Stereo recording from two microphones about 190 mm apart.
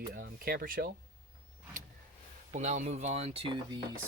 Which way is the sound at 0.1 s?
50° right (ahead or behind).